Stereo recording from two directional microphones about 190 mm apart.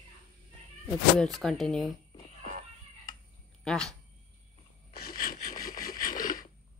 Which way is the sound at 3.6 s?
Centre (ahead or behind).